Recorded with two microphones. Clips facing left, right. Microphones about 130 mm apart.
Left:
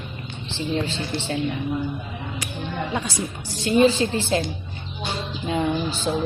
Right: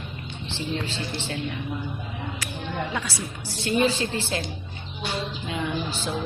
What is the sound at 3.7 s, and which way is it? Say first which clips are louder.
Speech: left 6 dB; 30° left (ahead or behind).